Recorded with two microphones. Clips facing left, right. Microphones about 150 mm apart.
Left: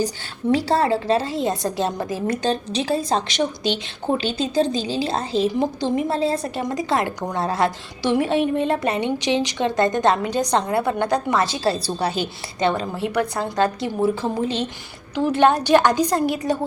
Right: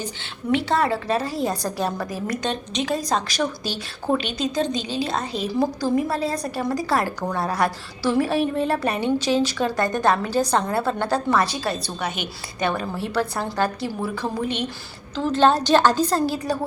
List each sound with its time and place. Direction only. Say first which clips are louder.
0.5 s a woman's voice: left 2 dB; 30° left (ahead or behind)
15.1 s a woman's voice: left 1 dB; 15° left (ahead or behind)